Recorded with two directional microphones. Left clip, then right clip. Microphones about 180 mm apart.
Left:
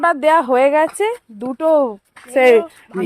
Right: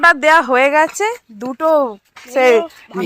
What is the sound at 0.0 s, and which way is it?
Speech, 10° left (ahead or behind).